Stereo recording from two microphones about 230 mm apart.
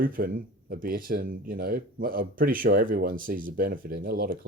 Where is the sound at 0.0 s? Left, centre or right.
Right.